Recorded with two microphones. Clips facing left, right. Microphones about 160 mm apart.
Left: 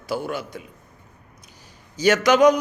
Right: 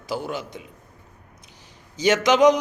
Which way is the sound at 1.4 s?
20° right (ahead or behind).